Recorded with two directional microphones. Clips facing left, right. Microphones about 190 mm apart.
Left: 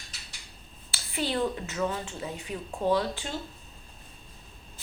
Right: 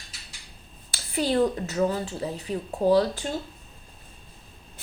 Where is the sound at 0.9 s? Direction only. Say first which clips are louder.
Right 5 dB; 40° right (ahead or behind).